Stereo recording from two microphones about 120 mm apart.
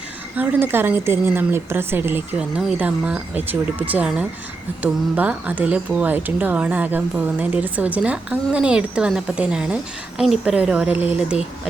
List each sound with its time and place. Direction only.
0.3 s speech: 15° right (ahead or behind)